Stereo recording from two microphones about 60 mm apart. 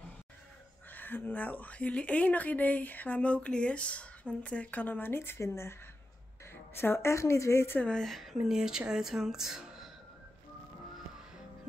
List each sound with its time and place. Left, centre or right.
0.9 s a woman's voice: left
6.5 s a woman's voice: left
8.0 s speech: centre